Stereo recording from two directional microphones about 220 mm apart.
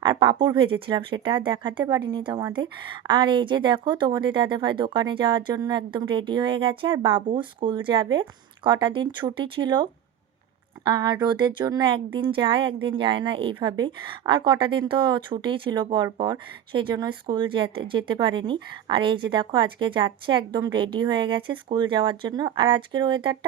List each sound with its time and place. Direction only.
0.0 s speech: 20° right (ahead or behind)